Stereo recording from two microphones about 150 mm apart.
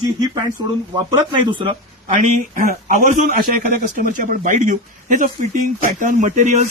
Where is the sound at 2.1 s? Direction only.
65° right (ahead or behind).